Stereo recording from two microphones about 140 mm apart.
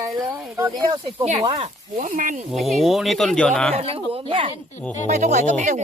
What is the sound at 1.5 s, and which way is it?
Speech, 45° right (ahead or behind).